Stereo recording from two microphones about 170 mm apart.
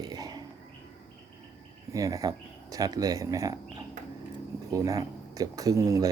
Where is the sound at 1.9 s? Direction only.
20° right (ahead or behind).